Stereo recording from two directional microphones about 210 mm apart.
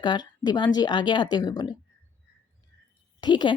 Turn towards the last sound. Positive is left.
turn(degrees=20)  # may be behind; listen again after turning